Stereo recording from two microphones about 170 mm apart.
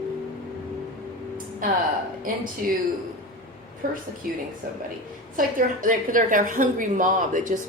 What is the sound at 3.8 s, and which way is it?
Speech, 55° right (ahead or behind).